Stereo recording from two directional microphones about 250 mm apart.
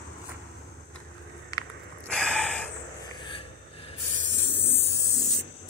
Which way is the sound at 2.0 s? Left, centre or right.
Centre.